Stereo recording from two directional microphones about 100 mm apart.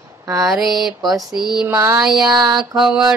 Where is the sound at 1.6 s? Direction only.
25° right (ahead or behind).